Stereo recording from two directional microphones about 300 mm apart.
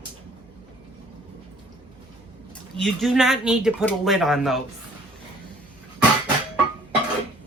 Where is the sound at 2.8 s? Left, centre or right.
Centre.